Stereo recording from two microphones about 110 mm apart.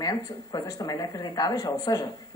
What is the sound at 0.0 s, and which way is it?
A woman's voice, 35° left (ahead or behind).